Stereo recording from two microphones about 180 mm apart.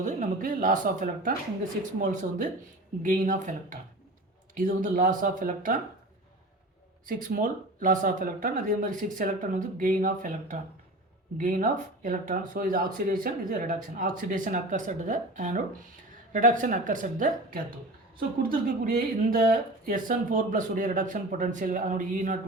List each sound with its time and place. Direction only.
0.0 s speech: 45° right (ahead or behind)
7.0 s speech: 50° right (ahead or behind)
18.9 s speech: 55° right (ahead or behind)